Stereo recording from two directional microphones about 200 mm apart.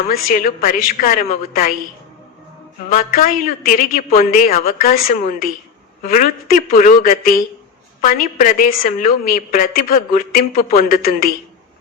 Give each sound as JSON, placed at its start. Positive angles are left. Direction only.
{"t": 0.1, "sound": "a woman's voice", "side_deg": 45}
{"t": 2.9, "sound": "a woman's voice", "side_deg": 45}